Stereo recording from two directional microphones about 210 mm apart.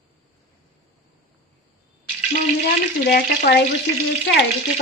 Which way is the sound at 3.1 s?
45° left (ahead or behind).